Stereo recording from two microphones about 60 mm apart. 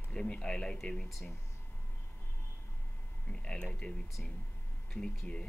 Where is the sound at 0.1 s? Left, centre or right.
Centre.